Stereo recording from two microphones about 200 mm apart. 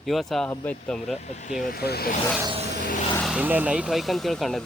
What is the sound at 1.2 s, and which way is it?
Speech, 35° left (ahead or behind).